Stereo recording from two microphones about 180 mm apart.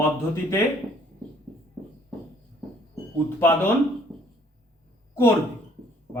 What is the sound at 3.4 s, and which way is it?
Speech, 10° left (ahead or behind).